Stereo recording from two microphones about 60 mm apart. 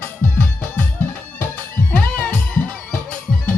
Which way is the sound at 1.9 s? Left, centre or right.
Left.